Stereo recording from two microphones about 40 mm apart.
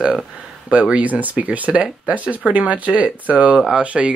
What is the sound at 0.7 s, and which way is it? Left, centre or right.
Speech, right.